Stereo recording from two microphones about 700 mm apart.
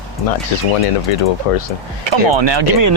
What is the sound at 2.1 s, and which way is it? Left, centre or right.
Speech, right.